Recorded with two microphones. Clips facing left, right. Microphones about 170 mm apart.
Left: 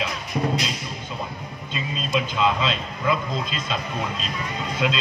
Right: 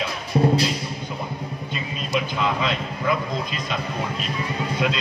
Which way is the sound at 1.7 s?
20° left (ahead or behind).